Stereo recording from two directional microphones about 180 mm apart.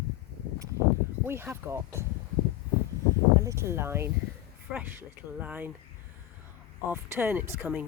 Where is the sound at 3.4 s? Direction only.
15° right (ahead or behind).